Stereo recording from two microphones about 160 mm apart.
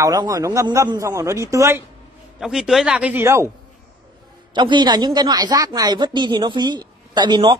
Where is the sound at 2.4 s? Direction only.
Centre (ahead or behind).